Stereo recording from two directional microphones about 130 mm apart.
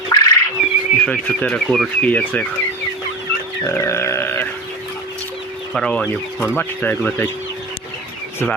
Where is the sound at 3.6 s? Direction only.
20° left (ahead or behind).